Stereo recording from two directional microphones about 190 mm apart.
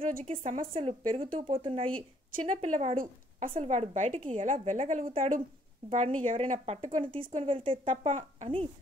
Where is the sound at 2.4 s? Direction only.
40° right (ahead or behind).